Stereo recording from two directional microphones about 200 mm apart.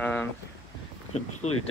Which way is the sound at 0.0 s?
10° left (ahead or behind).